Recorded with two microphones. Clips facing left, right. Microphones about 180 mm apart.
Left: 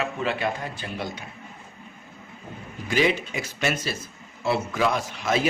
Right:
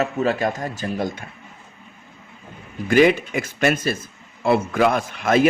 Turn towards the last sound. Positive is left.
turn(degrees=-55)  # may be behind; listen again after turning